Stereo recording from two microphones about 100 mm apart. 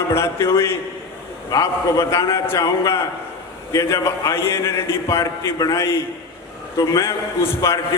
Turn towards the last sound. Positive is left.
turn(degrees=25)  # may be behind; listen again after turning